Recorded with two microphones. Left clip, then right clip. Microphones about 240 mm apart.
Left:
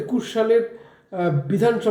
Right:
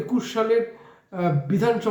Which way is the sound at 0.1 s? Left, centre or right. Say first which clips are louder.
Left 1 dB; right.